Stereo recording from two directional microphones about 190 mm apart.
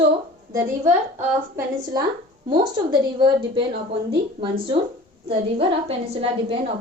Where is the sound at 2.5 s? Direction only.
25° right (ahead or behind).